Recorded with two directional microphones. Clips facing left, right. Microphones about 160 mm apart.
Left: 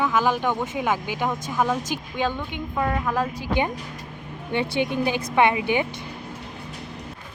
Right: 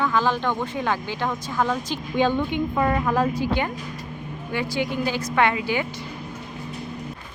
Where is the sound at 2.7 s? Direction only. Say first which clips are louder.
Even; centre (ahead or behind).